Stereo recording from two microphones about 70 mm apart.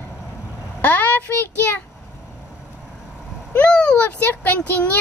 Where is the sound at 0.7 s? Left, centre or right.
Left.